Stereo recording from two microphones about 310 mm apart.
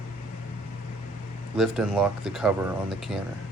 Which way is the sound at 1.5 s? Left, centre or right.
Centre.